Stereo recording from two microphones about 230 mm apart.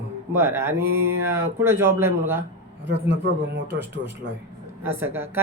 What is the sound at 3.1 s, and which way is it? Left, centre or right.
Speech, right.